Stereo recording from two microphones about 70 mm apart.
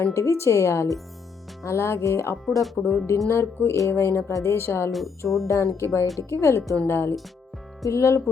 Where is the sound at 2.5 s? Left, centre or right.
Centre.